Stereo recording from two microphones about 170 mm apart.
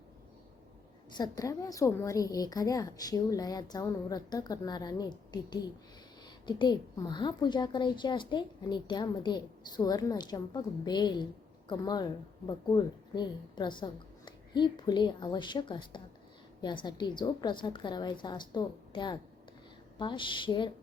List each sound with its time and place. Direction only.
1.1 s a woman's voice: 20° left (ahead or behind)